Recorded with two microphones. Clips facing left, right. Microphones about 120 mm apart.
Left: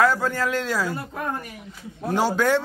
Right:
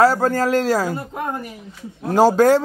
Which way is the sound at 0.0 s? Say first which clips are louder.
Right 5 dB; 40° right (ahead or behind).